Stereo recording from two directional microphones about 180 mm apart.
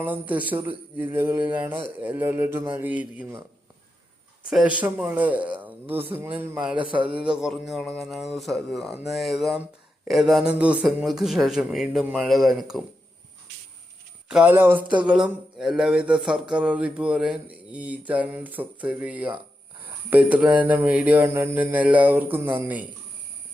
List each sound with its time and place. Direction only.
0.0 s speech: 10° right (ahead or behind)
4.4 s speech: 5° right (ahead or behind)
6.9 s a man's voice: 30° right (ahead or behind)
7.3 s speech: centre (ahead or behind)
14.3 s speech: 5° right (ahead or behind)